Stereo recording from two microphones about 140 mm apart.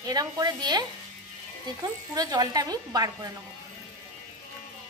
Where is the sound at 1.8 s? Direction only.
30° right (ahead or behind).